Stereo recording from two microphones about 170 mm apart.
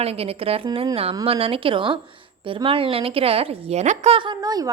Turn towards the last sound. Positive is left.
turn(degrees=-20)  # may be behind; listen again after turning